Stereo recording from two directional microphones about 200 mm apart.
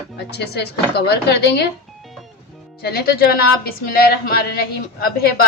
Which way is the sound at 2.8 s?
50° left (ahead or behind).